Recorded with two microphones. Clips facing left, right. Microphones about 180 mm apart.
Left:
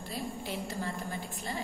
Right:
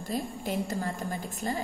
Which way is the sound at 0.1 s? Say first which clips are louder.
Right 6 dB; 45° right (ahead or behind).